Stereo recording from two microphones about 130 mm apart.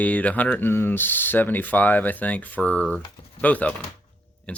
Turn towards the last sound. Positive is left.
turn(degrees=10)  # may be behind; listen again after turning